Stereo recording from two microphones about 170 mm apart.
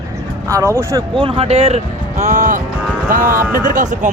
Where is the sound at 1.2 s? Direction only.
35° right (ahead or behind).